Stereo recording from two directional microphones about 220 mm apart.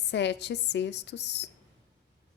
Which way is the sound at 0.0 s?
50° left (ahead or behind).